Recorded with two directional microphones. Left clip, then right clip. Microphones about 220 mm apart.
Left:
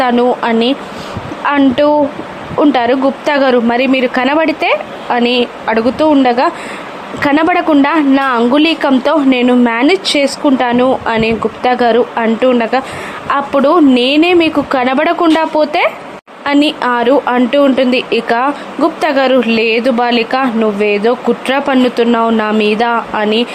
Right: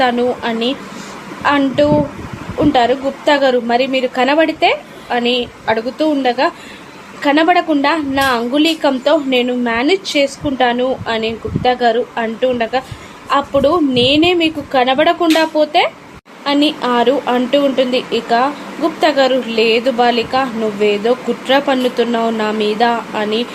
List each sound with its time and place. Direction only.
0.0 s a woman's voice: 20° left (ahead or behind)